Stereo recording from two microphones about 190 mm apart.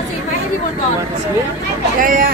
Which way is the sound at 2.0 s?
45° right (ahead or behind).